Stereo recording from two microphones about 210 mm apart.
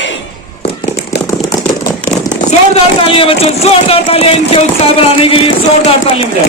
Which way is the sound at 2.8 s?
25° left (ahead or behind).